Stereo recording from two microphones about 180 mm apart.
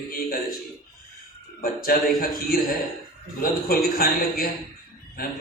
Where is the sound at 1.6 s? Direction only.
55° left (ahead or behind).